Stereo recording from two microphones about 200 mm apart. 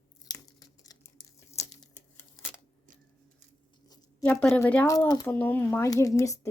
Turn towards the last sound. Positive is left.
turn(degrees=15)  # may be behind; listen again after turning